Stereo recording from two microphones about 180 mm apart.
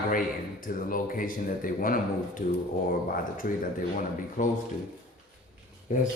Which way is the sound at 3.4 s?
50° left (ahead or behind).